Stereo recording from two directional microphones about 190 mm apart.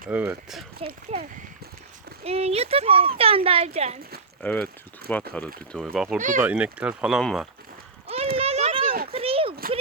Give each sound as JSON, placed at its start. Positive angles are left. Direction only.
{"t": 0.1, "sound": "speech", "side_deg": -10}
{"t": 0.8, "sound": "speech", "side_deg": -30}
{"t": 2.2, "sound": "speech", "side_deg": -30}
{"t": 4.4, "sound": "speech", "side_deg": 5}
{"t": 6.1, "sound": "speech", "side_deg": -40}
{"t": 6.4, "sound": "speech", "side_deg": -5}
{"t": 8.0, "sound": "a sound", "side_deg": -30}